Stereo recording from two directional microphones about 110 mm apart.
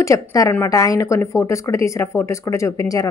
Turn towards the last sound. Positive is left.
turn(degrees=30)  # may be behind; listen again after turning